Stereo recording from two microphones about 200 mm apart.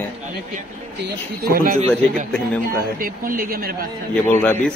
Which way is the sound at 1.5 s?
45° right (ahead or behind).